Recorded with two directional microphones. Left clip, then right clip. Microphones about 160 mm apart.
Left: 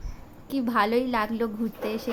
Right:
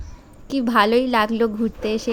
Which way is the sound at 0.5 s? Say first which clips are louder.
Right 7 dB; 35° right (ahead or behind).